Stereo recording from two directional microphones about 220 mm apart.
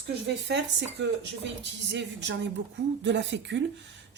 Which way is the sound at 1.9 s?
55° right (ahead or behind).